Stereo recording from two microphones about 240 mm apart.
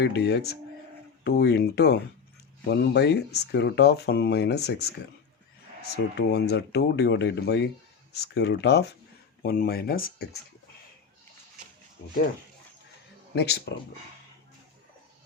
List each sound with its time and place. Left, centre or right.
0.0 s speech: left
6.1 s speech: left
13.3 s speech: left